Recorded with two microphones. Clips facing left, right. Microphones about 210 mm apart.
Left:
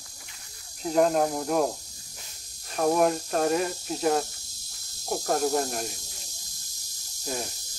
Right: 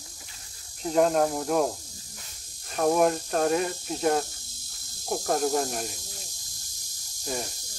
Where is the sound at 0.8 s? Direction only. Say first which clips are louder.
Even; centre (ahead or behind).